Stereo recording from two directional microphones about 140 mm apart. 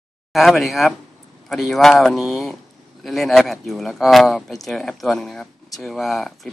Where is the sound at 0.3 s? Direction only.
Centre (ahead or behind).